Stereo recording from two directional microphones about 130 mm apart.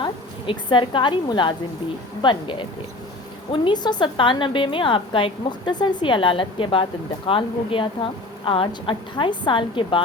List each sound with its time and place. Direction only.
0.0 s a woman's voice: 35° left (ahead or behind)